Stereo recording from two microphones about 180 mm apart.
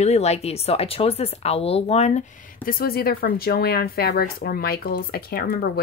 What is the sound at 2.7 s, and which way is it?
Speech, 55° left (ahead or behind).